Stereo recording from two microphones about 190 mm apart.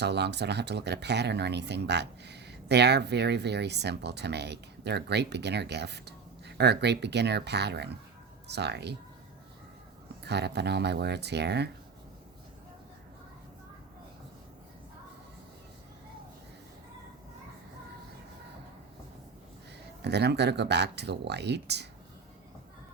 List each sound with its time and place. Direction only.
0.0 s speech: 65° right (ahead or behind)
10.2 s speech: 60° right (ahead or behind)
20.0 s speech: 60° right (ahead or behind)